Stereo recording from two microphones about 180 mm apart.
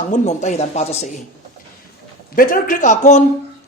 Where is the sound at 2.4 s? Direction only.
50° left (ahead or behind).